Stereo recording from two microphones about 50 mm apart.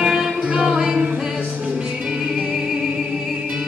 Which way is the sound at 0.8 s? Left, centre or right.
Centre.